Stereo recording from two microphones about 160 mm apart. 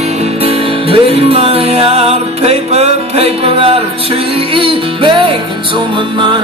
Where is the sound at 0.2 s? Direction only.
40° right (ahead or behind).